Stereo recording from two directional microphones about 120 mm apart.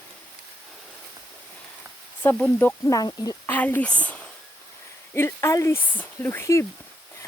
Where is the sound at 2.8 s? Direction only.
30° left (ahead or behind).